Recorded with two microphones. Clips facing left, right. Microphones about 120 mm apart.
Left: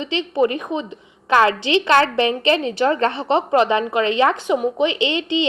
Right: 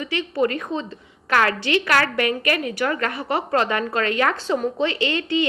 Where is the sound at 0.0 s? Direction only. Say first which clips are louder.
Left 3 dB; 20° left (ahead or behind).